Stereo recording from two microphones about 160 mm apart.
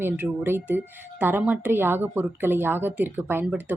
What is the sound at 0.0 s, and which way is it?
A woman's voice, 15° right (ahead or behind).